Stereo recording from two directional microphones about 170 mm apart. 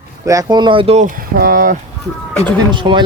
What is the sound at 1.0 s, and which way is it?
Speech, 55° right (ahead or behind).